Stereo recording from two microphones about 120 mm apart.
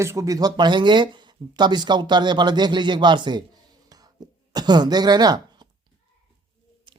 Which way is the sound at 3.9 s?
35° right (ahead or behind).